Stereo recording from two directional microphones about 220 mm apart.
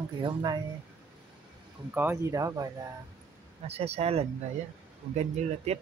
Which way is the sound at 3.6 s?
30° right (ahead or behind).